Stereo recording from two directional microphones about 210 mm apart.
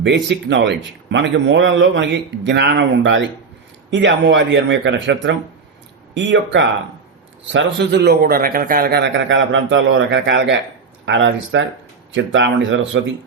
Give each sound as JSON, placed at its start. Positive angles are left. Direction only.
{"t": 0.0, "sound": "a man's voice", "side_deg": -60}